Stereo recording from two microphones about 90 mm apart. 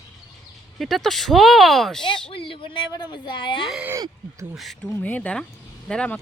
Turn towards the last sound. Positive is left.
turn(degrees=10)  # may be behind; listen again after turning